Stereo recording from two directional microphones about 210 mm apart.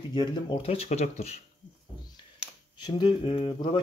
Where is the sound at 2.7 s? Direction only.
20° left (ahead or behind).